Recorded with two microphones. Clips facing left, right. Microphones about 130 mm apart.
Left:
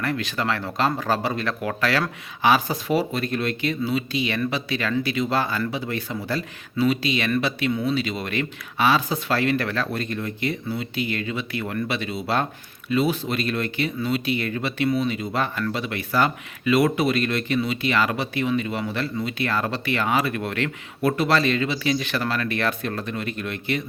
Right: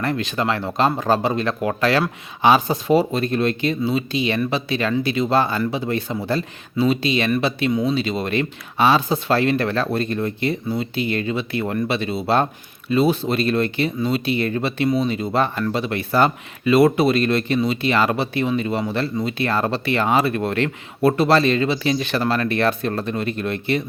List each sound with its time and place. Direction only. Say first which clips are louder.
0.0 s speech: right 4 dB; 25° right (ahead or behind)